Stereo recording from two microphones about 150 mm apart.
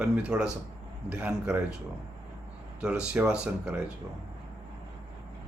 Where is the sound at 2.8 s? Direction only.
5° right (ahead or behind).